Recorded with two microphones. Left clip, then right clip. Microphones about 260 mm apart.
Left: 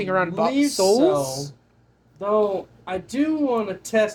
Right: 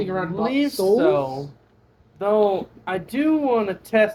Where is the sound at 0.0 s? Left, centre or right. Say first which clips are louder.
Left 3 dB; left.